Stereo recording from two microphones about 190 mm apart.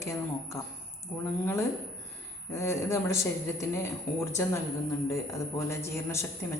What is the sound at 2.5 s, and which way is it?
A woman's voice, 15° left (ahead or behind).